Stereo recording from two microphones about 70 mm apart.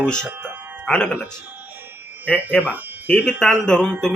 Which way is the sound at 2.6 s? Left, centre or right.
Right.